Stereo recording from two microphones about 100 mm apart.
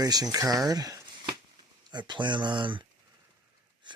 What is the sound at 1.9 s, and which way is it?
Speech, 50° right (ahead or behind).